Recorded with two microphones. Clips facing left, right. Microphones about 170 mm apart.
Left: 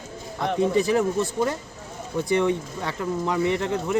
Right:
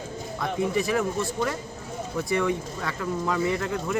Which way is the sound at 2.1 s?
25° left (ahead or behind).